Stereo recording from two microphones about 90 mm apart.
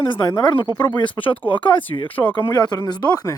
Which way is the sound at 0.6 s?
60° left (ahead or behind).